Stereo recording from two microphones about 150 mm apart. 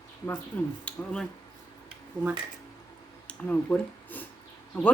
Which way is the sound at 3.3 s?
10° left (ahead or behind).